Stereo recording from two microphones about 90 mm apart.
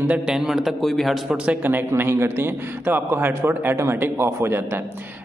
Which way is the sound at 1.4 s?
20° right (ahead or behind).